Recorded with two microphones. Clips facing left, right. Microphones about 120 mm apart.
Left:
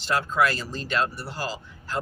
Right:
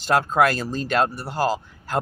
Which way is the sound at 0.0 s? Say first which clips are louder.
Right 5 dB; 50° right (ahead or behind).